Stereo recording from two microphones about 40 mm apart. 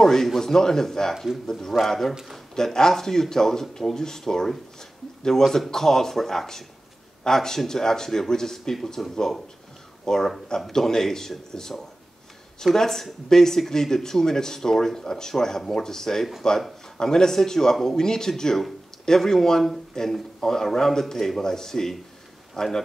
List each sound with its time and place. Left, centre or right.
0.0 s speech: centre
1.1 s speech: centre
1.5 s speech: centre